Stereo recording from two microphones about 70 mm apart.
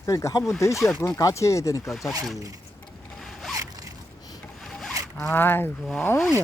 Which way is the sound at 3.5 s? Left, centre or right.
Right.